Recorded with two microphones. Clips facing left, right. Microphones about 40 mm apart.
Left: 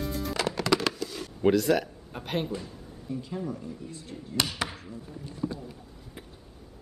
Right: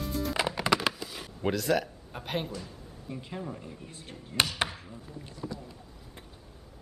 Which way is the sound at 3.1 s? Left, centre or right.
Right.